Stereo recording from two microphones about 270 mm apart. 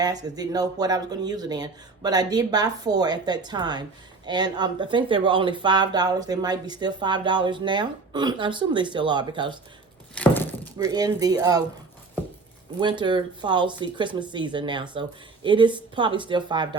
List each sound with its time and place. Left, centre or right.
0.0 s speech: centre
10.2 s speech: centre
10.8 s speech: centre
12.8 s speech: centre